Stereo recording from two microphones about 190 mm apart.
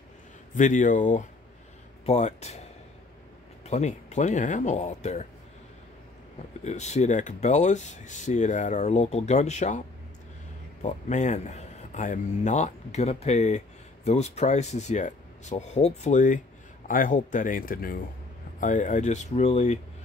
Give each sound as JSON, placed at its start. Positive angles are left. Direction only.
{"t": 0.6, "sound": "speech", "side_deg": 40}
{"t": 3.6, "sound": "speech", "side_deg": 35}
{"t": 6.6, "sound": "speech", "side_deg": 35}